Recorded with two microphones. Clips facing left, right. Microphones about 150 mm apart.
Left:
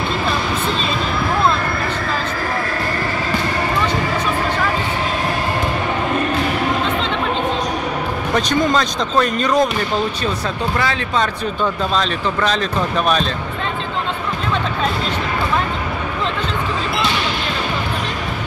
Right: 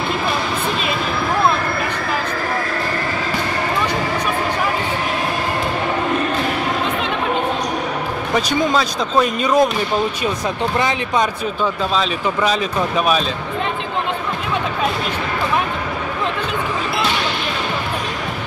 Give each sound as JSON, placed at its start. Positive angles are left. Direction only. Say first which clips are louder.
{"t": 8.4, "sound": "speech", "louder": "left 1 dB", "side_deg": -5}
{"t": 10.8, "sound": "speech", "louder": "right 1 dB", "side_deg": -20}
{"t": 11.9, "sound": "speech", "louder": "even", "side_deg": -5}